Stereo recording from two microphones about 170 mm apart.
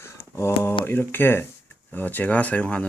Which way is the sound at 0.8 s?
10° left (ahead or behind).